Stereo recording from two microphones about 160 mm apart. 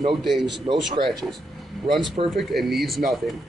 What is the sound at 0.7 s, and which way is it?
Speech, 45° right (ahead or behind).